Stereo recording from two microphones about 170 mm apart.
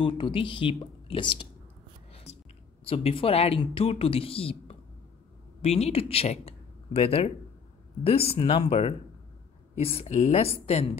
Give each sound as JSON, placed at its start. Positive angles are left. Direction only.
{"t": 0.0, "sound": "speech", "side_deg": 30}
{"t": 2.3, "sound": "a sound", "side_deg": 40}
{"t": 2.8, "sound": "speech", "side_deg": 35}